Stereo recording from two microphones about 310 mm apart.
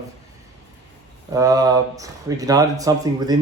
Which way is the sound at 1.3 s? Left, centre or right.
Centre.